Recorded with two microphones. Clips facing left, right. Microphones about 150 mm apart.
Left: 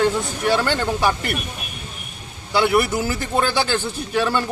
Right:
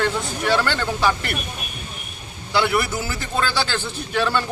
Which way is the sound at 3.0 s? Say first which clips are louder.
Left 5 dB; 50° left (ahead or behind).